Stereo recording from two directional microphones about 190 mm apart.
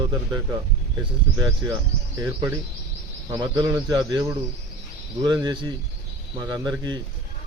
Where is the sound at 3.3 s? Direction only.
20° right (ahead or behind).